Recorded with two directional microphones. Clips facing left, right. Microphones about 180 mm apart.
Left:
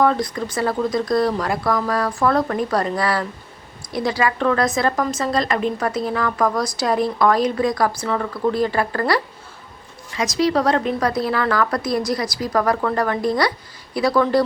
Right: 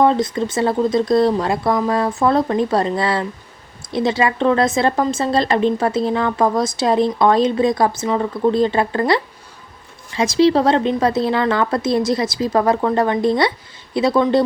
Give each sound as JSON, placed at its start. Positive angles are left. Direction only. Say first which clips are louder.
{"t": 0.0, "sound": "a woman's voice", "louder": "right 3 dB", "side_deg": -25}